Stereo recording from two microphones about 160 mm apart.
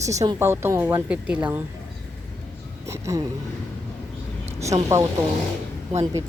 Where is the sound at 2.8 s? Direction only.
20° right (ahead or behind).